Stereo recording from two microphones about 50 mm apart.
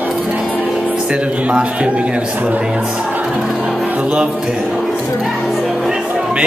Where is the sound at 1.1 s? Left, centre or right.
Right.